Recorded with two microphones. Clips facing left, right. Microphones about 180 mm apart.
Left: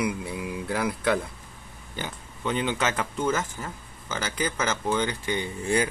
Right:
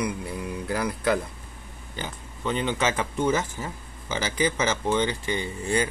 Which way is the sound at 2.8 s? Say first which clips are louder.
Right 2 dB; 10° right (ahead or behind).